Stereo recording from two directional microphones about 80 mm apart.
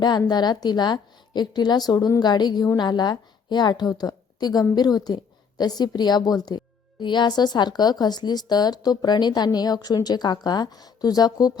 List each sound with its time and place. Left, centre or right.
0.3 s a woman's voice: left
7.0 s speech: left